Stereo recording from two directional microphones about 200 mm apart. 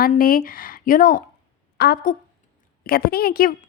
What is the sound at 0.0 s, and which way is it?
A woman's voice, 45° left (ahead or behind).